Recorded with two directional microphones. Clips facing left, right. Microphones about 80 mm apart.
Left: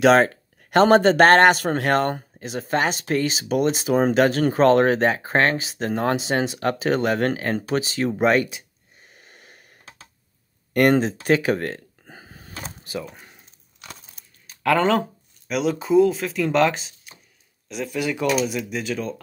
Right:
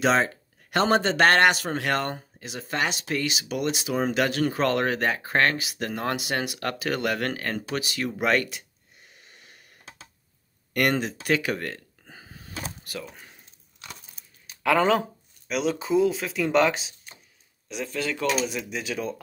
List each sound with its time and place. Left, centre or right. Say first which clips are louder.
0.0 s speech: left 7 dB; left; by 8.5 s centre
9.1 s a sound: left 4 dB; left
10.7 s a sound: left 7 dB; left
13.0 s speech: left 4 dB; centre
14.5 s speech: left 2 dB; centre
17.9 s mechanisms: left 4 dB; centre
18.4 s speech: left 4 dB; centre